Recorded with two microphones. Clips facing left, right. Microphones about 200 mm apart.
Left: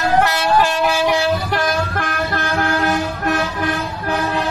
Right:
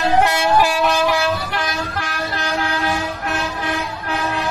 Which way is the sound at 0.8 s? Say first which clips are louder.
Even; 10° left (ahead or behind).